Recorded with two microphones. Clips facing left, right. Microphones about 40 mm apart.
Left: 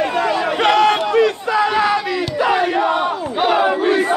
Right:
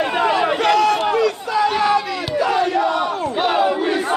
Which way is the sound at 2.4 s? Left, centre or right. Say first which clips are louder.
Left 1 dB; left.